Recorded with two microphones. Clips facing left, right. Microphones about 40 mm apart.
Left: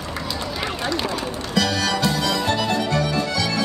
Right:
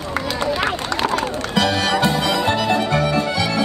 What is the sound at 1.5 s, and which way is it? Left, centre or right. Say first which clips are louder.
Music: right 3 dB; right.